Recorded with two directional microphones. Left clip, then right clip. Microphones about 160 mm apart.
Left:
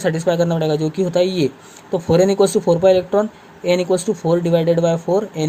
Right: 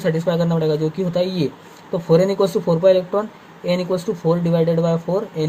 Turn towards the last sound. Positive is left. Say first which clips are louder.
# left 3 dB
turn(degrees=45)  # may be behind; listen again after turning